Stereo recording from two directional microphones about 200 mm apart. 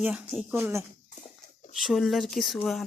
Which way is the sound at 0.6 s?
15° right (ahead or behind).